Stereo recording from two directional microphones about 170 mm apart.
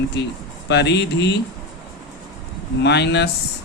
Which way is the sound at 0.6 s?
85° left.